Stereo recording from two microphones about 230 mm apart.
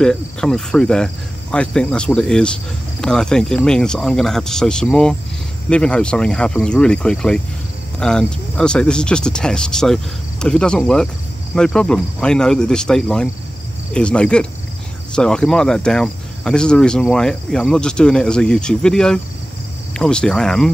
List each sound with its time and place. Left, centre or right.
0.0 s speech: centre